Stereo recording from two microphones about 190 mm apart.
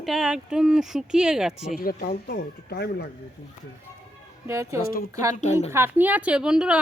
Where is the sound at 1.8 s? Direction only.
50° left (ahead or behind).